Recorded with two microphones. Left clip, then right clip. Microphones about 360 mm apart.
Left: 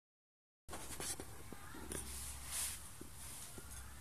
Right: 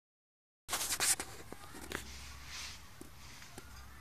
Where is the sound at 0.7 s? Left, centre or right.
Right.